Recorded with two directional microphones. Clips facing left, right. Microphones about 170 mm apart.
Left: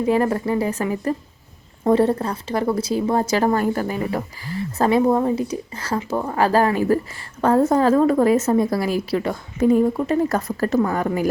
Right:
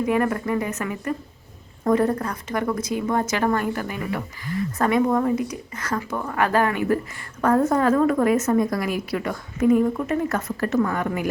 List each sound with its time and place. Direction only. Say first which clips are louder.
0.0 s a woman's voice: left 3 dB; 30° left (ahead or behind)